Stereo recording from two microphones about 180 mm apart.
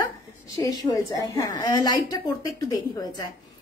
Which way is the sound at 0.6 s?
20° left (ahead or behind).